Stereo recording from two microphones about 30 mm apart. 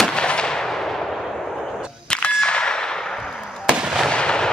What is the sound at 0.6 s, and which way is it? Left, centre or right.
Artillery fire, centre.